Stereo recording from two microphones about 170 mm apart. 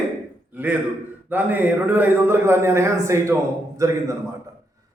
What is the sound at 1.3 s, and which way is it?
A man's voice, 10° right (ahead or behind).